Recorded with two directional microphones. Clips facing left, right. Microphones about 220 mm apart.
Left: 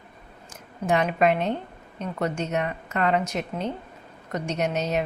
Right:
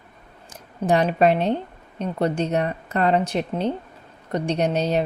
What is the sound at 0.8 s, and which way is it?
Speech, 35° right (ahead or behind).